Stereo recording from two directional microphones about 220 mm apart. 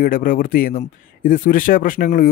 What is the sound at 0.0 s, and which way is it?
Speech, 40° left (ahead or behind).